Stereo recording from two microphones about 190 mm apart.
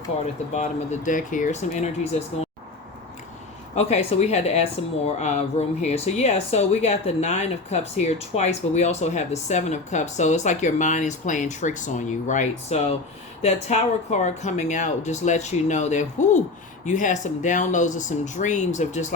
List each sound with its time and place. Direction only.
0.5 s speech: 35° left (ahead or behind)
3.8 s speech: 35° left (ahead or behind)